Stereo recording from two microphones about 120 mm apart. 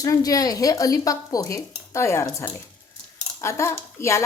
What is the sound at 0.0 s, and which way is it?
Speech, 30° left (ahead or behind).